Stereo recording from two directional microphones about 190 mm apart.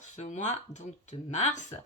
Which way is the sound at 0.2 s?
40° left (ahead or behind).